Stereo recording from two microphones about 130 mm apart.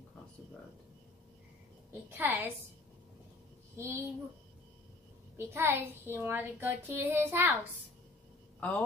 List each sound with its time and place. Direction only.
1.9 s child singing: 15° right (ahead or behind)
3.7 s a child's voice: 20° right (ahead or behind)
5.4 s child singing: 15° right (ahead or behind)
8.5 s a man's voice: 10° left (ahead or behind)